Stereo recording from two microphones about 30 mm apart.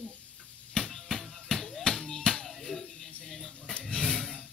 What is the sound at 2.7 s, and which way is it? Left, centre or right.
Music, centre.